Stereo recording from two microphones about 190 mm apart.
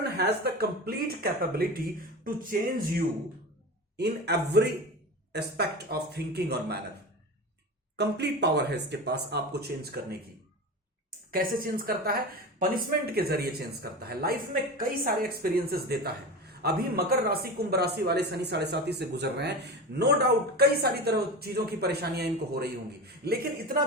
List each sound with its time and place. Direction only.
0.0 s speech: 60° right (ahead or behind)
3.9 s speech: 60° right (ahead or behind)
7.9 s speech: 60° right (ahead or behind)
11.3 s speech: 50° right (ahead or behind)